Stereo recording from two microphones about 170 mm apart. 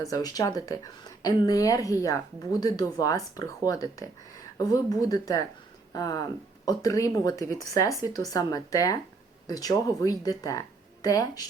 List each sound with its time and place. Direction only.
0.0 s speech: 20° left (ahead or behind)